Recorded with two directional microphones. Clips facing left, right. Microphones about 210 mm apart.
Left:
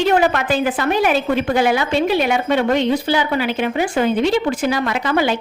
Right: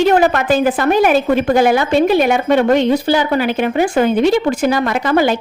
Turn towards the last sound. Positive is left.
turn(degrees=-45)  # may be behind; listen again after turning